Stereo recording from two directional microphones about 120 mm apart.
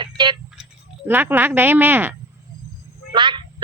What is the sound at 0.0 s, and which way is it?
Tick-tock, 40° right (ahead or behind).